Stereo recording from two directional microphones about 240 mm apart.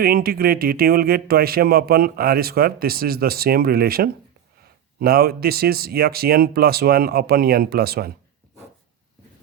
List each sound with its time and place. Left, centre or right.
0.0 s speech: right